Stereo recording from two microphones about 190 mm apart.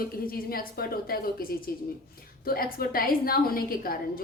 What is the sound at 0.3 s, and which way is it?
A woman's voice, 50° left (ahead or behind).